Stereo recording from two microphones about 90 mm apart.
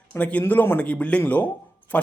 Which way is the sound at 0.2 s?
15° left (ahead or behind).